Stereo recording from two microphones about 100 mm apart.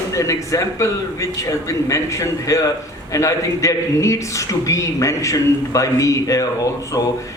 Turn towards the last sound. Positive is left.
turn(degrees=35)  # may be behind; listen again after turning